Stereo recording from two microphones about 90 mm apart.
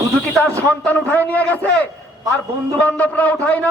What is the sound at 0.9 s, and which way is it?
Speech, 20° left (ahead or behind).